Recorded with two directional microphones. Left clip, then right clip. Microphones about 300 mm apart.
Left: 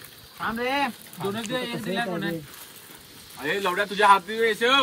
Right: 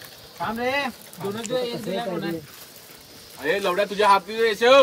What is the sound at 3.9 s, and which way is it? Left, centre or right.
Speech, centre.